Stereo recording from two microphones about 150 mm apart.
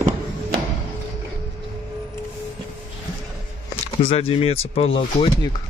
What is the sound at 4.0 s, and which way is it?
Speech, 40° left (ahead or behind).